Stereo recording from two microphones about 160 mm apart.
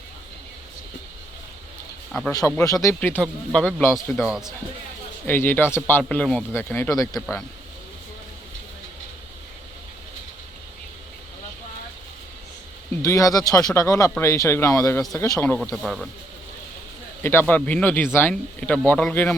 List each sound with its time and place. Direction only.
2.4 s speech: 15° left (ahead or behind)
4.3 s speech: 5° right (ahead or behind)
5.2 s speech: 15° left (ahead or behind)
13.0 s speech: 20° left (ahead or behind)
15.7 s speech: centre (ahead or behind)
17.2 s speech: 10° left (ahead or behind)